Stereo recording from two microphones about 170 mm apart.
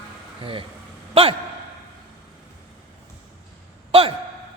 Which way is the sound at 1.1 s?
35° right (ahead or behind).